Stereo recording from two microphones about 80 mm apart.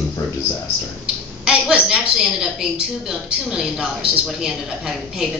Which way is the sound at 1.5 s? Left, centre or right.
Centre.